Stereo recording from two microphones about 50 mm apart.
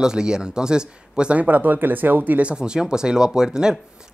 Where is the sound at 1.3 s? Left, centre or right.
Right.